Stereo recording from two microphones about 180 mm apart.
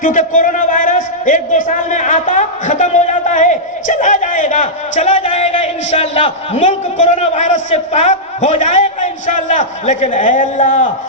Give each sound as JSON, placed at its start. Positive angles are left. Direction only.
{"t": 0.0, "sound": "a man's voice", "side_deg": 45}